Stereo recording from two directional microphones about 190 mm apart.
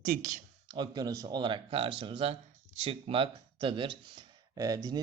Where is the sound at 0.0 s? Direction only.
45° right (ahead or behind).